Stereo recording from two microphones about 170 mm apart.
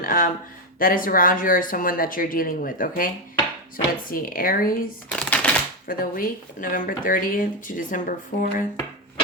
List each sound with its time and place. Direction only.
0.0 s speech: 55° left (ahead or behind)
4.1 s speech: 55° left (ahead or behind)
5.1 s shuffling cards: 5° left (ahead or behind)
5.9 s speech: 55° left (ahead or behind)